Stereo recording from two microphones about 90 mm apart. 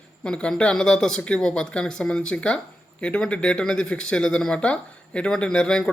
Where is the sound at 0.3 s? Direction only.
10° left (ahead or behind).